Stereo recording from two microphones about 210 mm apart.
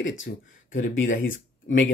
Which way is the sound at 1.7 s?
60° left (ahead or behind).